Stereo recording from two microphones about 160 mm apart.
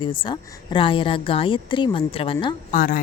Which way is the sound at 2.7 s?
60° left (ahead or behind).